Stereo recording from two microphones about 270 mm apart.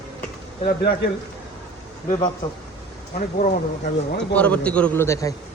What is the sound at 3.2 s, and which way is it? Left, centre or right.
Speech, left.